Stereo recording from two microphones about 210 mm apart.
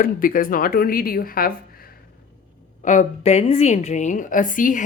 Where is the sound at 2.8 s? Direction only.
35° left (ahead or behind).